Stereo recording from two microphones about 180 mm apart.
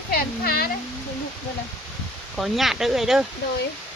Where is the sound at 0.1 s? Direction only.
55° left (ahead or behind).